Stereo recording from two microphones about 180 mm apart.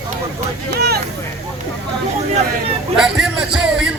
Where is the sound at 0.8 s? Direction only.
65° right (ahead or behind).